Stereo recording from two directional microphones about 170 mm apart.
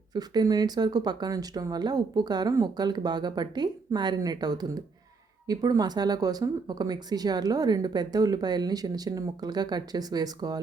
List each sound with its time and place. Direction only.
0.1 s speech: 25° right (ahead or behind)